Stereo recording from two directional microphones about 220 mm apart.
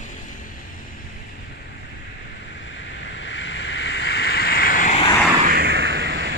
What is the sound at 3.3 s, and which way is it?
Waves, 55° left (ahead or behind).